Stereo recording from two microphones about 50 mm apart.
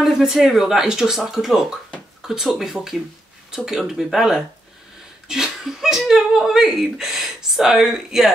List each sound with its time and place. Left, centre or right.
0.0 s speech: centre